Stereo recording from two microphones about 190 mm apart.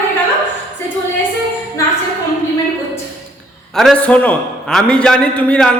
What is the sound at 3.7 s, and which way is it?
A man's voice, centre (ahead or behind).